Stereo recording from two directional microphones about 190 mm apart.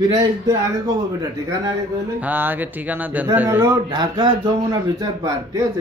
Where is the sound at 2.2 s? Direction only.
10° right (ahead or behind).